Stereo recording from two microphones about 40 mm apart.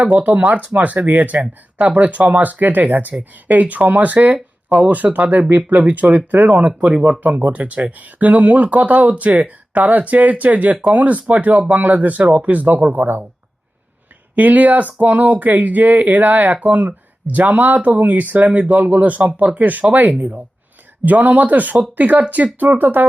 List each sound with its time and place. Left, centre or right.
0.0 s speech: right
6.7 s speech: right
14.3 s speech: right